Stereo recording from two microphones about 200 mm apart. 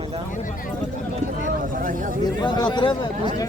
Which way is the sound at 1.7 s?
40° right (ahead or behind).